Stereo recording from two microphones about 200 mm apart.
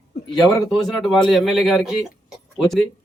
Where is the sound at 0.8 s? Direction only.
Centre (ahead or behind).